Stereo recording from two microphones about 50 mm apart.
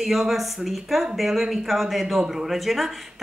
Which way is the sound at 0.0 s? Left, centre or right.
Centre.